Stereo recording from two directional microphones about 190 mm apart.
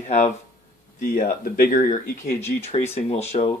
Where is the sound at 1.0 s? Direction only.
50° left (ahead or behind).